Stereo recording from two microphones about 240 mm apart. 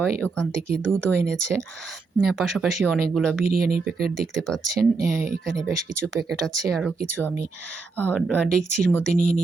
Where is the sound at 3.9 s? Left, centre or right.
Right.